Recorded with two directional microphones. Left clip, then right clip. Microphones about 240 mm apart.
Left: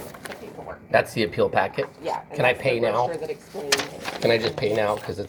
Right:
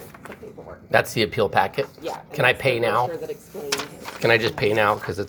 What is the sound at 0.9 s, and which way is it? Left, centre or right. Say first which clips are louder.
Speech: right 1 dB; right.